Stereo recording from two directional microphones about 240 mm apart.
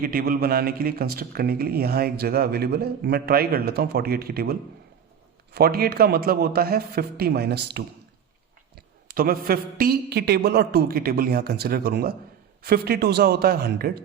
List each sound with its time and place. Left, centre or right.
0.0 s a man's voice: right
5.5 s a man's voice: right